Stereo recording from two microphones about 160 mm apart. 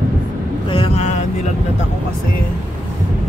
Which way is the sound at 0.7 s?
35° left (ahead or behind).